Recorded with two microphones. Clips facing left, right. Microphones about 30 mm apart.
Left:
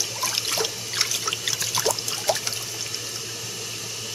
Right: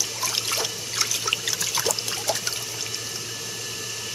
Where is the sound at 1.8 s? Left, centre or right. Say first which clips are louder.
Left 2 dB; right.